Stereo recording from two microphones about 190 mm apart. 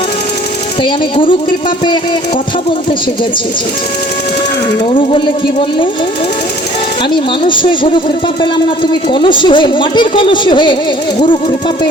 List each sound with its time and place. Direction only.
0.8 s speech: 25° left (ahead or behind)
4.9 s speech: 25° left (ahead or behind)
7.4 s speech: 25° left (ahead or behind)